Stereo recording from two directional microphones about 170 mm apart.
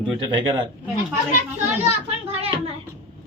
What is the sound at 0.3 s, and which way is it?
Speech, 30° right (ahead or behind).